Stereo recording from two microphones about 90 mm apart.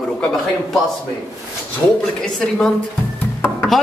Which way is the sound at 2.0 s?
10° left (ahead or behind).